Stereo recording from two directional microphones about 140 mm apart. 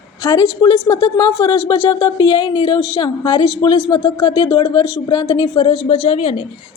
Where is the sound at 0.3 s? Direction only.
25° left (ahead or behind).